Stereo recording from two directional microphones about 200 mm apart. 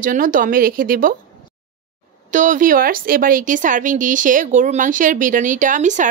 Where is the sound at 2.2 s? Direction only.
40° right (ahead or behind).